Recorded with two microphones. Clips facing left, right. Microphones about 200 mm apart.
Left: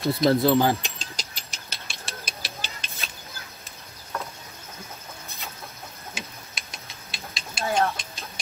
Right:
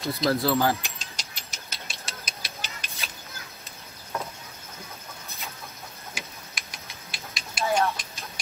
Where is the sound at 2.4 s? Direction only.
30° left (ahead or behind).